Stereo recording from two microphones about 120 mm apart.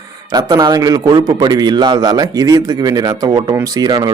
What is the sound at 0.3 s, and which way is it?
A man's voice, 30° right (ahead or behind).